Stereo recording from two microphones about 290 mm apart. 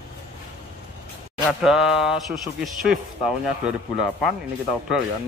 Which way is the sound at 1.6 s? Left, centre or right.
Centre.